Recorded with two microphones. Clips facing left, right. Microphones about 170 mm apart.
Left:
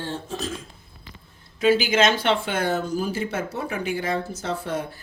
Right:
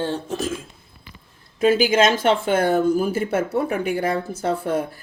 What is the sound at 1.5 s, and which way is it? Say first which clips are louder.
Speech: right 3 dB; 50° right (ahead or behind).